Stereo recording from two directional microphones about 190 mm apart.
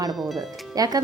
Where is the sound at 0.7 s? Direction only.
20° right (ahead or behind).